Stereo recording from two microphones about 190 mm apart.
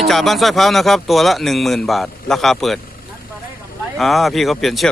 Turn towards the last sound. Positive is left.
turn(degrees=0)  # may be behind; listen again after turning